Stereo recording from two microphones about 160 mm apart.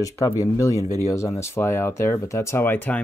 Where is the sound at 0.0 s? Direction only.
20° left (ahead or behind).